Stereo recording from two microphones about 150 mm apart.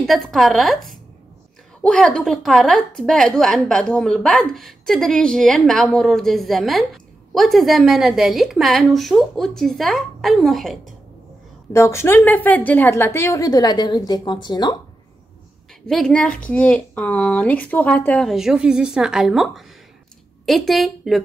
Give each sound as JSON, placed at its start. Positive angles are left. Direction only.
{"t": 0.0, "sound": "a woman's voice", "side_deg": 0}
{"t": 11.7, "sound": "a woman's voice", "side_deg": 20}
{"t": 15.9, "sound": "speech", "side_deg": 5}
{"t": 18.3, "sound": "a woman's voice", "side_deg": -5}